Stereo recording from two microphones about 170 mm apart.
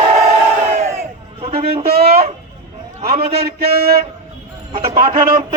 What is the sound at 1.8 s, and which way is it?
Speech, 65° right (ahead or behind).